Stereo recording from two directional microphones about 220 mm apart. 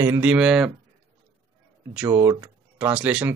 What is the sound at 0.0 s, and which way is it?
Speech, 10° right (ahead or behind).